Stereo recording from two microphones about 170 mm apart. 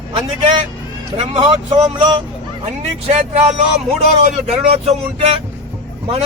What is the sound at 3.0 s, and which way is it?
A man's voice, 40° right (ahead or behind).